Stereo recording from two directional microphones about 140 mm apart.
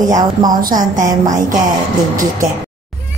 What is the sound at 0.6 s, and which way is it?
Speech, 70° right (ahead or behind).